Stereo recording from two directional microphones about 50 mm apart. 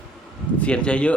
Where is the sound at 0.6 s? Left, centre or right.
Left.